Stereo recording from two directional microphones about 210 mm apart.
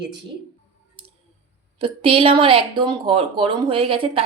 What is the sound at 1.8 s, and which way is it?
Speech, 25° right (ahead or behind).